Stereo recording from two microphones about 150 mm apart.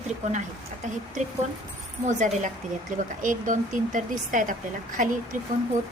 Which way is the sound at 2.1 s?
55° right (ahead or behind).